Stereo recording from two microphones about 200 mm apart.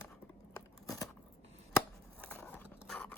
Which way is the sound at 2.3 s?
10° left (ahead or behind).